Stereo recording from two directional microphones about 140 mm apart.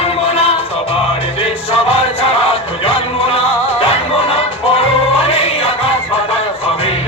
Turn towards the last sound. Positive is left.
turn(degrees=45)  # may be behind; listen again after turning